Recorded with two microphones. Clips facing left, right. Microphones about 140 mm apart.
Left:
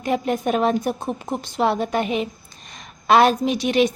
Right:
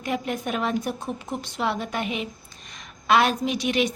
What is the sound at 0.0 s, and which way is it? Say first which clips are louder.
A woman's voice: left 6 dB; 35° left (ahead or behind).